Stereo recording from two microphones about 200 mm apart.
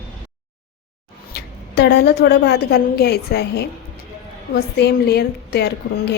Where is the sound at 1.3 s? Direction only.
55° left (ahead or behind).